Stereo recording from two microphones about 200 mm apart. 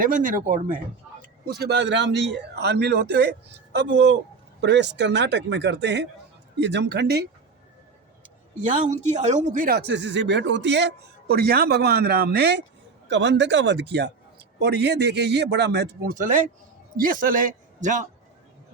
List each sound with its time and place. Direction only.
0.0 s a man's voice: 40° right (ahead or behind)
8.6 s a man's voice: 35° right (ahead or behind); by 16.1 s 55° right (ahead or behind)
16.1 s a man's voice: 40° right (ahead or behind)